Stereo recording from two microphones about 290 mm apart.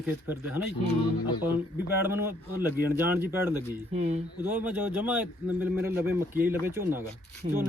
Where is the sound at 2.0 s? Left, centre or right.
Centre.